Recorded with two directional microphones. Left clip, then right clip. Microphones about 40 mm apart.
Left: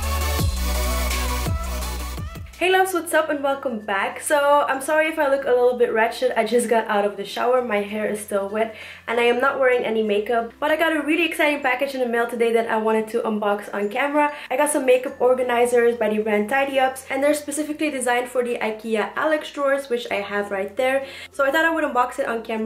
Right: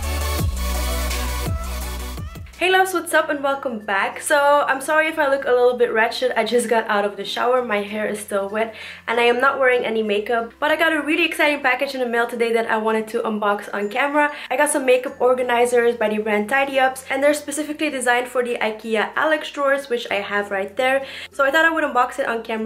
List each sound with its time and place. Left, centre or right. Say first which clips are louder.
2.6 s a woman's voice: right 1 dB; centre